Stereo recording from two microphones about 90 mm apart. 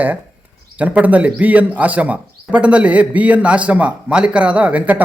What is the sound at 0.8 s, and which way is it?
A man's voice, 15° right (ahead or behind).